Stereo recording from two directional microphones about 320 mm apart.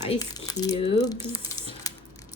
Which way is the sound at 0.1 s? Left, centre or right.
Centre.